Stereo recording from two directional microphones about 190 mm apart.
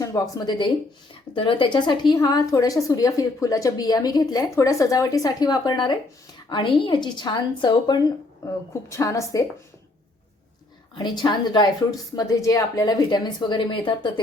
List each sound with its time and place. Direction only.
0.0 s a woman's voice: 20° left (ahead or behind)
10.9 s a woman's voice: 25° left (ahead or behind)